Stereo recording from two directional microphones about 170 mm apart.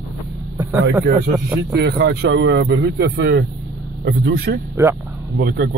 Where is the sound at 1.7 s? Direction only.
70° right (ahead or behind).